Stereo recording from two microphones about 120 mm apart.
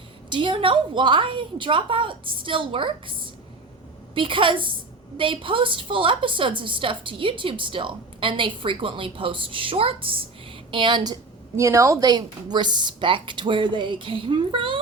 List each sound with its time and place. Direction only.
0.3 s a woman's voice: 45° right (ahead or behind)
11.5 s a woman's voice: 25° right (ahead or behind); by 14.8 s 45° right (ahead or behind)